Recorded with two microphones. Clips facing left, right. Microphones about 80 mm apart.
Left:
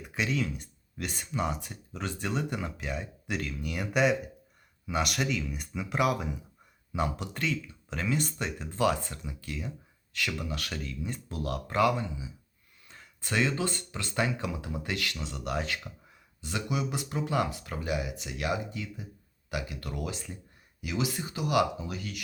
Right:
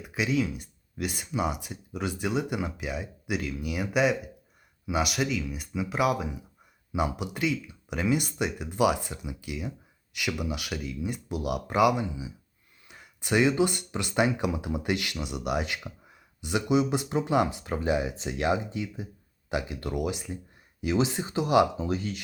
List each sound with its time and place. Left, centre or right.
0.0 s speech: centre; by 22.2 s right